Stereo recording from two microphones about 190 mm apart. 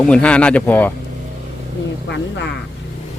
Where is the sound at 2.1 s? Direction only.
65° left (ahead or behind).